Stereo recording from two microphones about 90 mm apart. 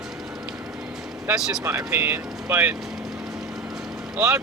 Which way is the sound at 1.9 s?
25° right (ahead or behind).